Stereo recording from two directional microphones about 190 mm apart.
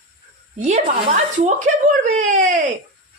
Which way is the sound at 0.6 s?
35° right (ahead or behind).